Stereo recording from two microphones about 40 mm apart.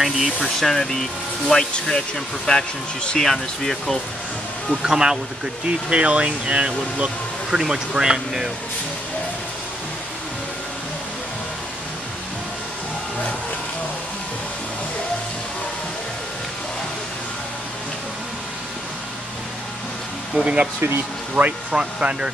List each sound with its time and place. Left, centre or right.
0.0 s speech: centre
0.6 s speech: centre
4.8 s speech: centre
5.7 s speech: right
7.5 s speech: centre
20.3 s speech: right
21.4 s speech: right
21.7 s speech: right